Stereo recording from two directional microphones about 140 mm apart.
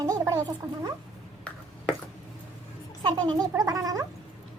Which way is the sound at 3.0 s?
30° right (ahead or behind).